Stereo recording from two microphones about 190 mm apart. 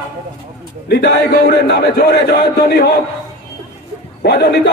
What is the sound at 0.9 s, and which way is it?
A man's voice, 60° left (ahead or behind).